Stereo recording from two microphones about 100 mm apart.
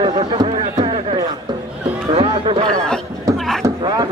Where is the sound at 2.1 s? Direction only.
60° right (ahead or behind).